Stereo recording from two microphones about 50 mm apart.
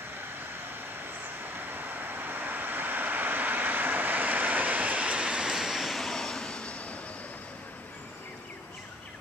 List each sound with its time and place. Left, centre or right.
1.0 s vehicle: right; by 7.0 s left